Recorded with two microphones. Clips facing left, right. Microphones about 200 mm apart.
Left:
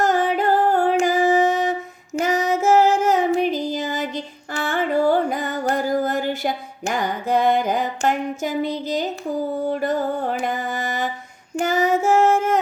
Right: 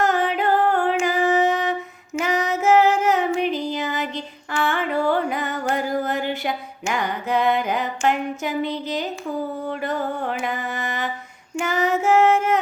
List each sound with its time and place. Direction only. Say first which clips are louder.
0.0 s music: left 2 dB; 45° left (ahead or behind)
1.4 s a sound: left 2 dB; 45° left (ahead or behind)
2.1 s music: left 2 dB; 45° left (ahead or behind)
11.5 s female singing: left 3 dB; 45° left (ahead or behind)